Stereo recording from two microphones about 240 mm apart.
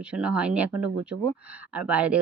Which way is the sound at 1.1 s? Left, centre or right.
Right.